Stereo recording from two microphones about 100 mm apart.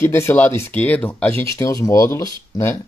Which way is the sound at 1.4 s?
30° left (ahead or behind).